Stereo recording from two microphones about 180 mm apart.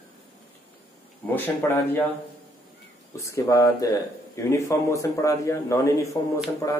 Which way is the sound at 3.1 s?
15° left (ahead or behind).